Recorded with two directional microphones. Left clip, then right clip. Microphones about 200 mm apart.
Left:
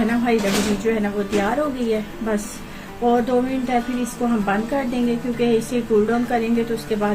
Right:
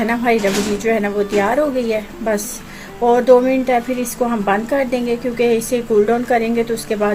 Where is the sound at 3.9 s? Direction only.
50° right (ahead or behind).